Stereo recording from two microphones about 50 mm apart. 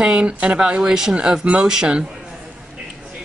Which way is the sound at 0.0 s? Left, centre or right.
Centre.